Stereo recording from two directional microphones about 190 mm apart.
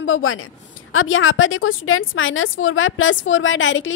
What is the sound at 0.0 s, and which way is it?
A woman's voice, 90° left.